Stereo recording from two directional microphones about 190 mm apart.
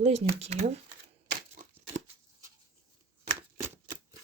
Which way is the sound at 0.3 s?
35° right (ahead or behind).